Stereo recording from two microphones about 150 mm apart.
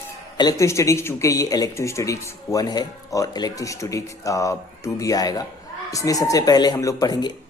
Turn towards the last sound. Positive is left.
turn(degrees=25)  # may be behind; listen again after turning